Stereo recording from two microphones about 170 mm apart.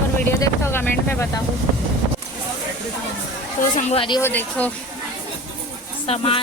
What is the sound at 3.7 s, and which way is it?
Speech, 45° left (ahead or behind).